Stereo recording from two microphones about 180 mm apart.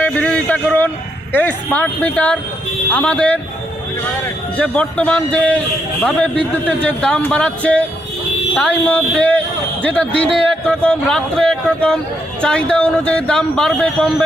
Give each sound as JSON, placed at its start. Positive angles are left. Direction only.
{"t": 0.0, "sound": "a sound", "side_deg": 10}
{"t": 1.3, "sound": "a man's voice", "side_deg": 10}
{"t": 4.5, "sound": "a man's voice", "side_deg": 10}